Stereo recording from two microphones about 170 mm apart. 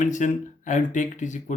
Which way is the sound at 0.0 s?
45° left (ahead or behind).